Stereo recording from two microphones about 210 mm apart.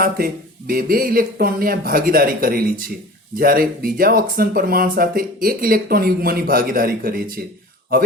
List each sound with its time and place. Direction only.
0.7 s speech: 45° right (ahead or behind)